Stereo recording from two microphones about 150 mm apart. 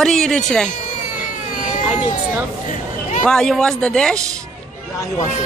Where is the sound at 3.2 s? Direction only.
5° left (ahead or behind).